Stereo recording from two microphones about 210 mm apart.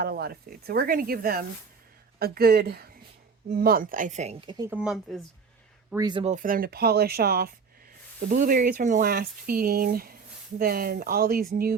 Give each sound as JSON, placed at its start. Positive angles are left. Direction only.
{"t": 0.0, "sound": "a woman's voice", "side_deg": -45}
{"t": 4.7, "sound": "speech", "side_deg": -5}
{"t": 5.9, "sound": "speech", "side_deg": -20}
{"t": 6.2, "sound": "speech", "side_deg": -40}